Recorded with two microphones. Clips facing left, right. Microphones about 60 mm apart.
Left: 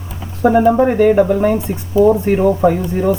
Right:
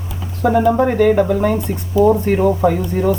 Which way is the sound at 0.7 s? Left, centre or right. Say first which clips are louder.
Left 2 dB; centre.